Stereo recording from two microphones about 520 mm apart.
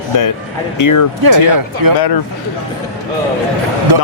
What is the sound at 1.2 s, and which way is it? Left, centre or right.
Speech, right.